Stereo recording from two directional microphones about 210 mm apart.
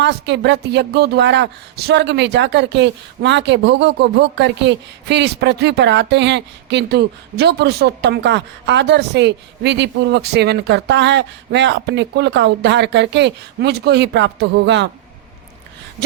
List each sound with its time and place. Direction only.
0.0 s a woman's voice: 55° right (ahead or behind)